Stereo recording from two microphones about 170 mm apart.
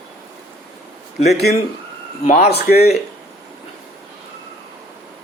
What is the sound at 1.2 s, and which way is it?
Speech, 40° left (ahead or behind).